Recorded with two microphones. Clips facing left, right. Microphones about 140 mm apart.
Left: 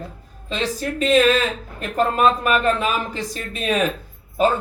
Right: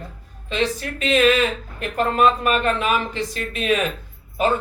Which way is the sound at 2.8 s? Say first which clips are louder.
Right 1 dB; 40° left (ahead or behind).